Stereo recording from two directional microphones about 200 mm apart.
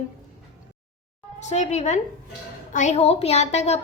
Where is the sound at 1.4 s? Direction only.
35° left (ahead or behind).